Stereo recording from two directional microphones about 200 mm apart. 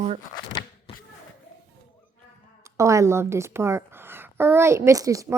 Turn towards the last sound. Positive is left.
turn(degrees=-15)  # may be behind; listen again after turning